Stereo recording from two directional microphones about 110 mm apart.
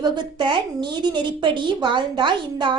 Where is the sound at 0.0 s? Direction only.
45° right (ahead or behind).